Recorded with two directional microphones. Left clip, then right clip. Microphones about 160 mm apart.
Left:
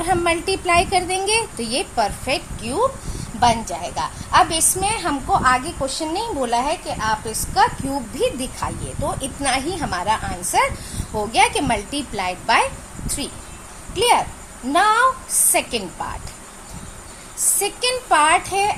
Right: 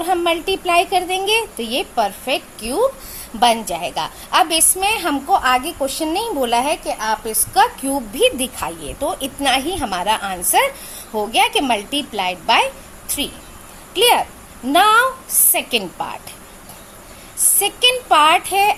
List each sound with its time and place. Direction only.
0.0 s a child's voice: 15° right (ahead or behind); by 10.7 s 35° right (ahead or behind)
10.9 s a woman's voice: 25° right (ahead or behind)
17.6 s a woman's voice: 25° right (ahead or behind)